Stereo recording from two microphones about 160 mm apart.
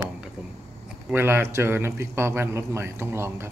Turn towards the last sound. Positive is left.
turn(degrees=-15)  # may be behind; listen again after turning